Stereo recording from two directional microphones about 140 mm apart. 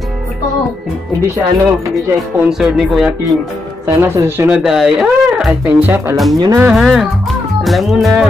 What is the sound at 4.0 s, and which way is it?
Speech, 15° right (ahead or behind).